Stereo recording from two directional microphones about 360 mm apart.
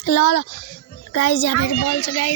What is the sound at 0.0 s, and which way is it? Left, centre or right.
Speech, left.